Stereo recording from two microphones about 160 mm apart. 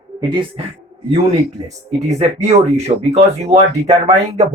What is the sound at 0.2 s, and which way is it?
Speech, 30° right (ahead or behind).